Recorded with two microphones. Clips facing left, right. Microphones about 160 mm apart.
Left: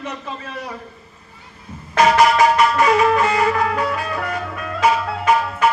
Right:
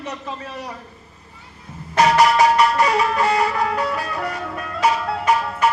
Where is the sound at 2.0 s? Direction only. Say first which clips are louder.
Left 1 dB; 35° right (ahead or behind).